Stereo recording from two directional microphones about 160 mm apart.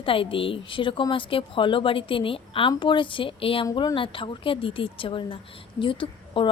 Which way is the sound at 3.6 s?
25° left (ahead or behind).